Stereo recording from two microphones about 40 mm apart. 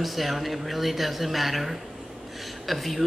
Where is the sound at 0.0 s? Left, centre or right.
Centre.